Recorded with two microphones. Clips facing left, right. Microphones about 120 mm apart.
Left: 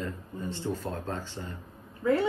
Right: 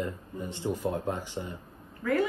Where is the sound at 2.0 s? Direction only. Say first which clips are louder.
Left 3 dB; 20° left (ahead or behind).